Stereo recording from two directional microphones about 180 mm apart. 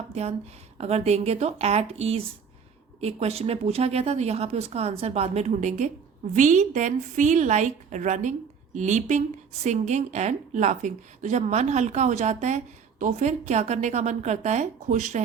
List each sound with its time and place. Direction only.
0.1 s a woman's voice: 35° right (ahead or behind)